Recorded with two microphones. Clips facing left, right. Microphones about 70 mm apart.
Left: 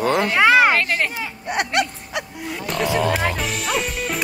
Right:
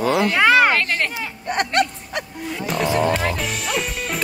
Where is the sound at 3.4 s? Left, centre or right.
Centre.